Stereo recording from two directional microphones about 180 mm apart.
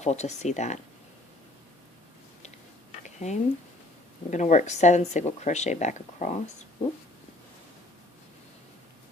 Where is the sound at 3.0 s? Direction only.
40° left (ahead or behind).